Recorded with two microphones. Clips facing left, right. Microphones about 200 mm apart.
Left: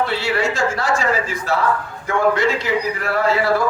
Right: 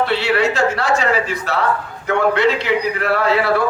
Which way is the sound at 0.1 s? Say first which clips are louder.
Right 3 dB; 65° right (ahead or behind).